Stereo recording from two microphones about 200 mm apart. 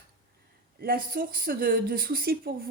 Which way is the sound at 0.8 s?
50° right (ahead or behind).